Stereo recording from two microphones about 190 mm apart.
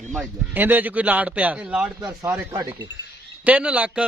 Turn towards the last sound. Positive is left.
turn(degrees=-5)  # may be behind; listen again after turning